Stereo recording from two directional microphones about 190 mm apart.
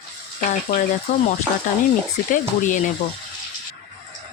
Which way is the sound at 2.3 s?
40° left (ahead or behind).